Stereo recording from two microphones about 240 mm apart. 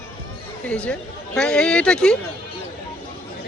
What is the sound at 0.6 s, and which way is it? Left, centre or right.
Speech, centre.